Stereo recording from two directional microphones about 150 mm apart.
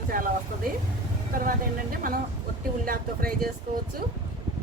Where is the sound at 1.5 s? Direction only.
70° right (ahead or behind).